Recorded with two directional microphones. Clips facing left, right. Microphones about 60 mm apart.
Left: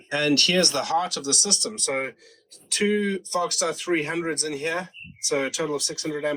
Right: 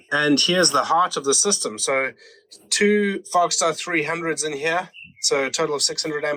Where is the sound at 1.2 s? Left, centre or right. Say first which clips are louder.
Right 7 dB; right.